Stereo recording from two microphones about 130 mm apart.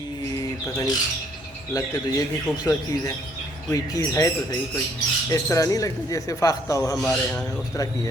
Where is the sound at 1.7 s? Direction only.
25° left (ahead or behind).